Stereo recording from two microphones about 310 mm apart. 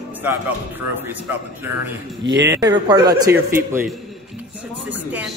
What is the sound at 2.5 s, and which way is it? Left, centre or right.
A man's voice, centre.